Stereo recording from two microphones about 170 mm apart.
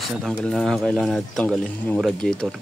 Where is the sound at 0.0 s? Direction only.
Centre (ahead or behind).